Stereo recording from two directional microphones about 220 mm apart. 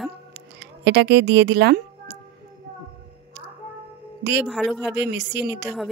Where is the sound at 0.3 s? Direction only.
50° right (ahead or behind).